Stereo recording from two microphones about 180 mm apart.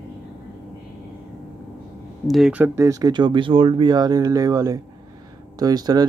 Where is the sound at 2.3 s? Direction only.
5° right (ahead or behind).